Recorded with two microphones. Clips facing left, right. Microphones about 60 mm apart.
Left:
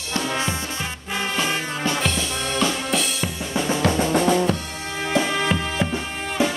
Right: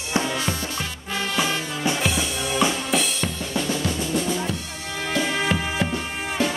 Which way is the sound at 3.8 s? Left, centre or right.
Left.